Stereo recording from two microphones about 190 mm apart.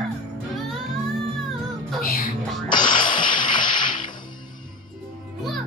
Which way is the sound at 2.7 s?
25° left (ahead or behind).